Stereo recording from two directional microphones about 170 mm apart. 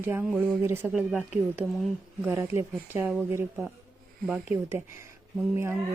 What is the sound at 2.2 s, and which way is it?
Speech, 10° right (ahead or behind).